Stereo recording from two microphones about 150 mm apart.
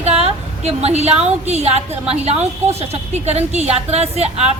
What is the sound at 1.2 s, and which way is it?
A woman's voice, 45° right (ahead or behind).